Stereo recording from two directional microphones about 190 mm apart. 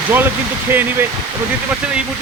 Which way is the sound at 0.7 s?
10° right (ahead or behind).